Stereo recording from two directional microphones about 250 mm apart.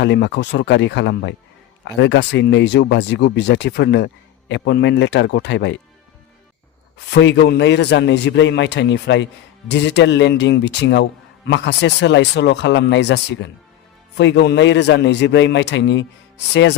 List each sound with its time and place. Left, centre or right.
0.0 s a man's voice: left
7.1 s a man's voice: left